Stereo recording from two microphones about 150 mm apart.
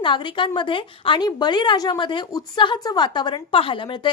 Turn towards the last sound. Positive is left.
turn(degrees=35)  # may be behind; listen again after turning